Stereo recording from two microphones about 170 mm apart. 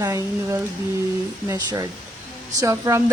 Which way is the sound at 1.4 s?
20° right (ahead or behind).